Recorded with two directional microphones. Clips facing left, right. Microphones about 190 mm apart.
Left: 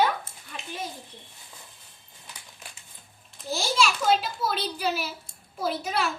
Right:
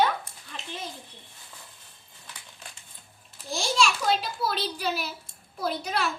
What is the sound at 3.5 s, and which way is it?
A child's voice, 5° left (ahead or behind).